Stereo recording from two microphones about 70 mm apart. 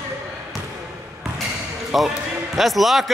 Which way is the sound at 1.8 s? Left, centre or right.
Centre.